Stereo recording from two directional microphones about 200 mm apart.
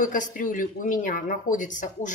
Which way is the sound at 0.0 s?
40° left (ahead or behind).